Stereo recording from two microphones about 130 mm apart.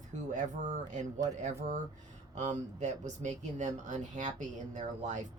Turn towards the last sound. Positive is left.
turn(degrees=-70)  # may be behind; listen again after turning